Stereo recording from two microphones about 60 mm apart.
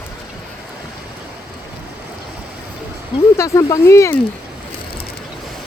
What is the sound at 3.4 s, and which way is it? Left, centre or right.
Speech, left.